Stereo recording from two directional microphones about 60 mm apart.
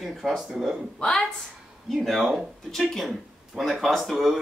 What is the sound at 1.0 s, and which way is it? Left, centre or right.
Speech, centre.